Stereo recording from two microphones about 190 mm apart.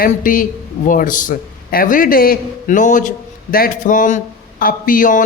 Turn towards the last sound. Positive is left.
turn(degrees=45)  # may be behind; listen again after turning